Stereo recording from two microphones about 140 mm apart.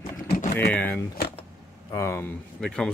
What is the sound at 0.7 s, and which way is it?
Speech, 15° left (ahead or behind).